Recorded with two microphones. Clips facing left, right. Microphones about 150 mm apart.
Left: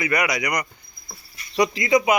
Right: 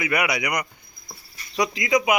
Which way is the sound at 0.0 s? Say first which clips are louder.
Left 1 dB; 10° right (ahead or behind).